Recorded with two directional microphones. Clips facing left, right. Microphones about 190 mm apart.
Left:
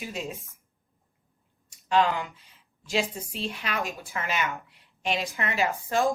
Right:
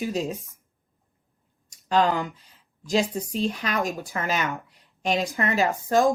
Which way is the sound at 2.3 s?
35° right (ahead or behind).